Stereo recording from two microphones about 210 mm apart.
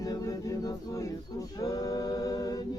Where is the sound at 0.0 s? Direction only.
15° left (ahead or behind).